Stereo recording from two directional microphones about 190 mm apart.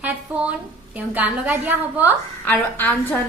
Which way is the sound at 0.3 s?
5° right (ahead or behind).